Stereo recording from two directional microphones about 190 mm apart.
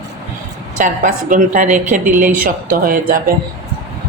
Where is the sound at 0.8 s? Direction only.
45° right (ahead or behind).